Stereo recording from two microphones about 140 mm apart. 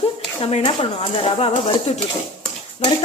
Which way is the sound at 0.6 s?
40° left (ahead or behind).